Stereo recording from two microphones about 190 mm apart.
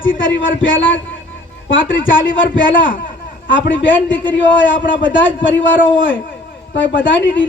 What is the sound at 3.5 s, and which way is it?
A man's voice, 75° left (ahead or behind).